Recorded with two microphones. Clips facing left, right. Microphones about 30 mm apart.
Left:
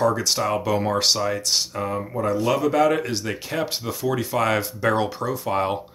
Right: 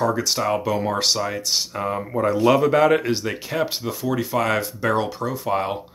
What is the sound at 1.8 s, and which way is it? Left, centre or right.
Speech, centre.